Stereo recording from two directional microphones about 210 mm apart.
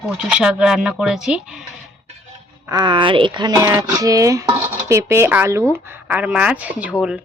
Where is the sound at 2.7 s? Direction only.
20° right (ahead or behind).